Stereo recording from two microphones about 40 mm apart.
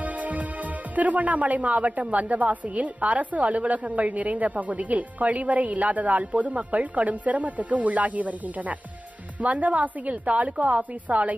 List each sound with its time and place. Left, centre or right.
0.0 s music: right
0.9 s a woman's voice: right